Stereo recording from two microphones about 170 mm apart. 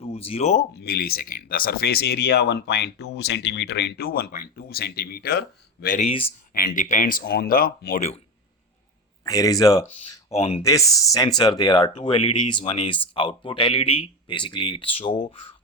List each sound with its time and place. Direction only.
0.0 s speech: 35° left (ahead or behind)
0.7 s speech: 70° left (ahead or behind)
6.0 s speech: 35° left (ahead or behind)
6.5 s speech: 60° left (ahead or behind)
9.2 s speech: 20° left (ahead or behind)
9.9 s speech: 35° left (ahead or behind)
10.6 s speech: 20° left (ahead or behind)